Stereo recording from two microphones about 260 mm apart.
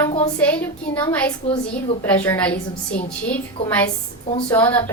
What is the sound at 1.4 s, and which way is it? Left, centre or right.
Speech, left.